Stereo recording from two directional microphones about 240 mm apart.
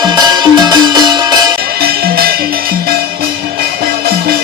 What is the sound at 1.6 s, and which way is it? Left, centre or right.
Music, right.